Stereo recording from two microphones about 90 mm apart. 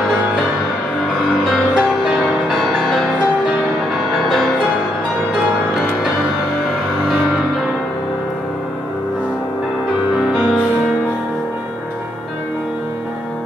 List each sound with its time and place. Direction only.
1.4 s music: 5° right (ahead or behind)